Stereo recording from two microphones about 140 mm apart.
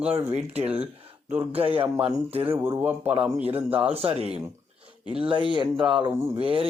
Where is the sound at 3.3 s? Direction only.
45° right (ahead or behind).